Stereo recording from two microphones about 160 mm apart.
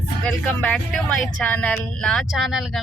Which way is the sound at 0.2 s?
5° left (ahead or behind).